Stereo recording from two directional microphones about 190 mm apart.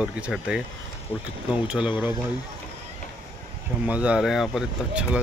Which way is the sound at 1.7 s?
25° left (ahead or behind).